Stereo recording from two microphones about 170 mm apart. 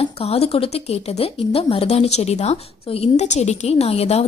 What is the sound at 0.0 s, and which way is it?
A woman's voice, 35° left (ahead or behind).